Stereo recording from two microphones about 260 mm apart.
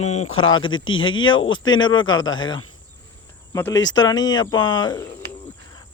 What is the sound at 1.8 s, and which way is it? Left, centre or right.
Speech, centre.